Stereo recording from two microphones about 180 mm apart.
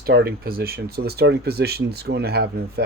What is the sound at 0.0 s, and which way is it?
Speech, 65° right (ahead or behind).